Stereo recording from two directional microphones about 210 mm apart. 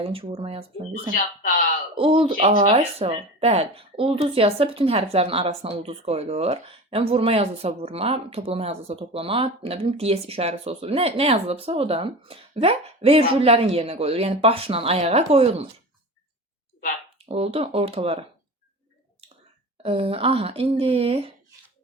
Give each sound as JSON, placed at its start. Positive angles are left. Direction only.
{"t": 0.0, "sound": "a woman's voice", "side_deg": -25}
{"t": 2.0, "sound": "a woman's voice", "side_deg": -25}
{"t": 17.2, "sound": "a woman's voice", "side_deg": -30}
{"t": 19.8, "sound": "a woman's voice", "side_deg": -25}